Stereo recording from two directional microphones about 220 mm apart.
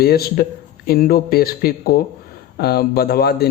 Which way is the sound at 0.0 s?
45° left (ahead or behind).